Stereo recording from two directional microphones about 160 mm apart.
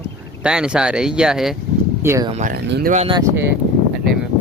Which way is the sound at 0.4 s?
5° right (ahead or behind).